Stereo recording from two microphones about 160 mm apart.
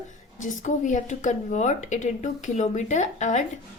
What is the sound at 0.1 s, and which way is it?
A woman's voice, 50° left (ahead or behind).